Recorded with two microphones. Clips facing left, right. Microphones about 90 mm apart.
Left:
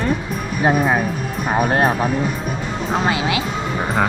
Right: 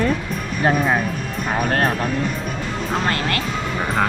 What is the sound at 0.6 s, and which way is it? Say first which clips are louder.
Speech: left 2 dB; 10° left (ahead or behind).